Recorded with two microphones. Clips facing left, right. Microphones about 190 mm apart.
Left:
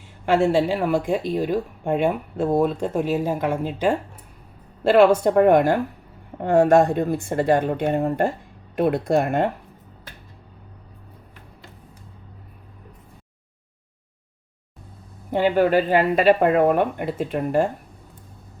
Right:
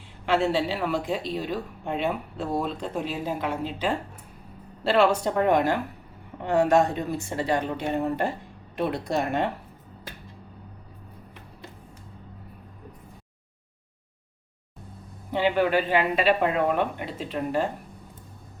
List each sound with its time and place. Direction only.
0.3 s speech: 45° left (ahead or behind)
15.3 s speech: 45° left (ahead or behind)